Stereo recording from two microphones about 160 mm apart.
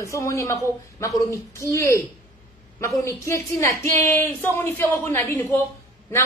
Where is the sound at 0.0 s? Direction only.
20° left (ahead or behind).